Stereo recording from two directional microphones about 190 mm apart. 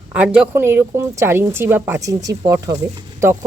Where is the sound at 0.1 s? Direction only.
5° right (ahead or behind).